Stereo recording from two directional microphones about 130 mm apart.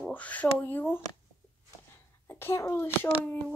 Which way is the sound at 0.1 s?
10° left (ahead or behind).